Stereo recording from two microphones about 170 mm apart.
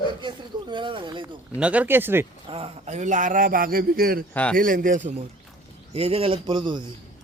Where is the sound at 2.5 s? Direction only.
35° right (ahead or behind).